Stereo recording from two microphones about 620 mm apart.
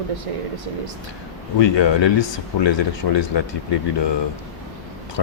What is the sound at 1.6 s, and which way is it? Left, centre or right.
Speech, left.